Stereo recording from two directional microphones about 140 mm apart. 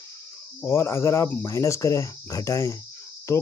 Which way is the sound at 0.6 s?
20° left (ahead or behind).